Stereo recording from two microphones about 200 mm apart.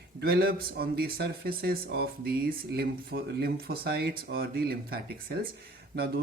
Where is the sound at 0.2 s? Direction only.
50° right (ahead or behind).